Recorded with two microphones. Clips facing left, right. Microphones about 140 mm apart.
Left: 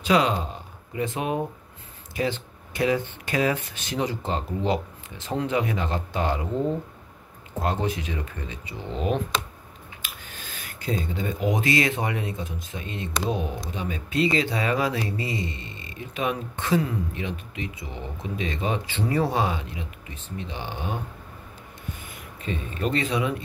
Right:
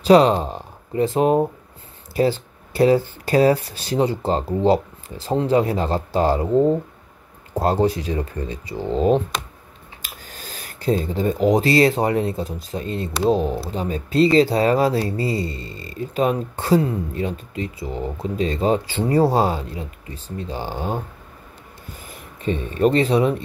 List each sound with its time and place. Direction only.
0.0 s speech: 35° right (ahead or behind)
22.0 s speech: 35° right (ahead or behind)